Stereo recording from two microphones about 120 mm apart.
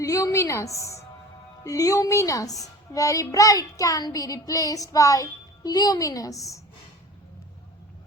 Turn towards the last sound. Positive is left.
turn(degrees=30)  # may be behind; listen again after turning